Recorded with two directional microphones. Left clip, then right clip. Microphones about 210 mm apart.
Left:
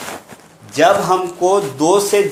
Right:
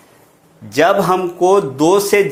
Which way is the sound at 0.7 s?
40° right (ahead or behind).